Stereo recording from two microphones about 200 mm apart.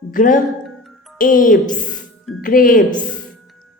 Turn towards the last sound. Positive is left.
turn(degrees=45)  # may be behind; listen again after turning